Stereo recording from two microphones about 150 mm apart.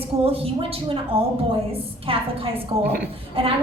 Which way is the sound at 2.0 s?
40° right (ahead or behind).